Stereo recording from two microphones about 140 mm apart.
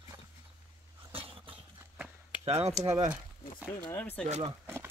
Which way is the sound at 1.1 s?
40° right (ahead or behind).